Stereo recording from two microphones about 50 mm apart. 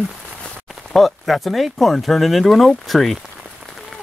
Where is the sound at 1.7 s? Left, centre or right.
Centre.